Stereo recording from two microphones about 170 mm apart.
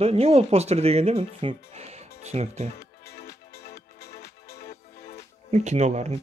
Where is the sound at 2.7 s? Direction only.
65° left (ahead or behind).